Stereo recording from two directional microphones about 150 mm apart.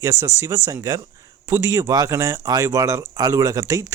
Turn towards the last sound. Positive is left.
turn(degrees=-20)  # may be behind; listen again after turning